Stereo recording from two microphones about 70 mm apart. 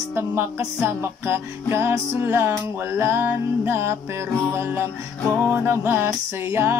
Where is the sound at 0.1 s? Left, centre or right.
Right.